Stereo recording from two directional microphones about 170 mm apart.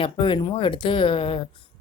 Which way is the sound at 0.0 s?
30° left (ahead or behind).